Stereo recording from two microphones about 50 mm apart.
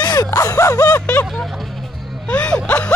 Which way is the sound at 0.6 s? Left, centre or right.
Left.